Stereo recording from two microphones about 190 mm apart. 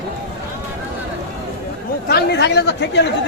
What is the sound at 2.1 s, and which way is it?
Chatter, 60° left (ahead or behind).